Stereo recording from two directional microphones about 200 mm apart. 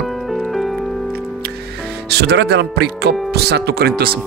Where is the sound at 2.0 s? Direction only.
55° right (ahead or behind).